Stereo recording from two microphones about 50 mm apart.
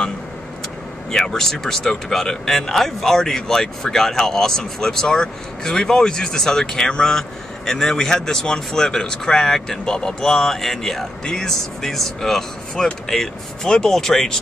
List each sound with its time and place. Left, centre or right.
1.1 s a man's voice: centre